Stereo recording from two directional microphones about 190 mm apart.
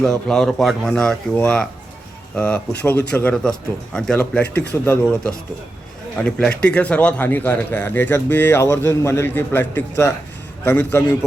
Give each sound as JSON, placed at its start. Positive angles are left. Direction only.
{"t": 0.0, "sound": "speech", "side_deg": 5}
{"t": 4.4, "sound": "speech", "side_deg": 60}
{"t": 4.7, "sound": "a man's voice", "side_deg": 10}